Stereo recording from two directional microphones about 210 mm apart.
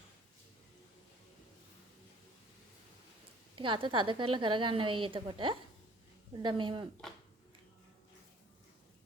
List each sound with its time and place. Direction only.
3.5 s a woman's voice: 25° right (ahead or behind)